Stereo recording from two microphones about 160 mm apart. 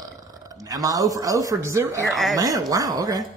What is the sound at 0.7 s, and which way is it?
Speech, 20° right (ahead or behind).